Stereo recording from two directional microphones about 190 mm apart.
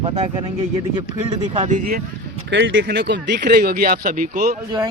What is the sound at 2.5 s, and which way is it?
Speech, 70° right (ahead or behind).